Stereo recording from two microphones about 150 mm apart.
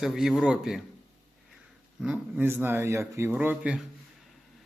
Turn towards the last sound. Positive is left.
turn(degrees=-10)  # may be behind; listen again after turning